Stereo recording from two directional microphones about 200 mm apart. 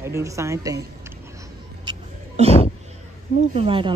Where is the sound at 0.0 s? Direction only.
15° right (ahead or behind).